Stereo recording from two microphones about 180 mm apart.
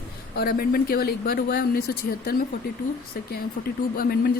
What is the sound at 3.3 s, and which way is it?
Speech, 55° left (ahead or behind).